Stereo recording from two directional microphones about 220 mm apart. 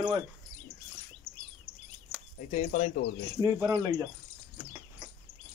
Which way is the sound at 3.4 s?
15° right (ahead or behind).